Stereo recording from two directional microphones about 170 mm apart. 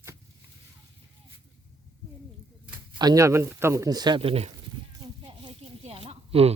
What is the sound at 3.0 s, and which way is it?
Speech, 20° right (ahead or behind).